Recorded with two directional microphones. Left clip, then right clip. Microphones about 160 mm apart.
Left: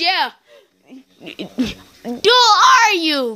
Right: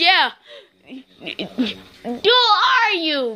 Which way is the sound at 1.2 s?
30° left (ahead or behind).